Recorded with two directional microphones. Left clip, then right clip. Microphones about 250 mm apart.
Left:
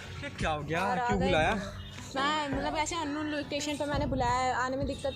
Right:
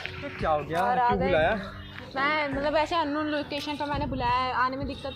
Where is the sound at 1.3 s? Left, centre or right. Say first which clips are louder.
Right 4 dB; left.